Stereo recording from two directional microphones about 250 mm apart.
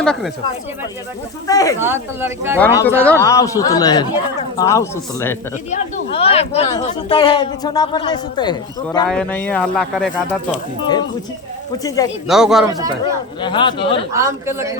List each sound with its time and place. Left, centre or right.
0.0 s speech: centre
1.5 s speech: centre
1.8 s speech: centre
2.6 s speech: centre
5.7 s speech: left
9.0 s speech: centre
11.8 s speech: centre
12.3 s speech: centre
13.4 s speech: centre
14.1 s speech: centre